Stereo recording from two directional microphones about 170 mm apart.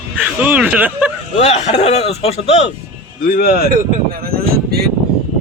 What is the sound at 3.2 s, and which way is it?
Speech, 60° left (ahead or behind).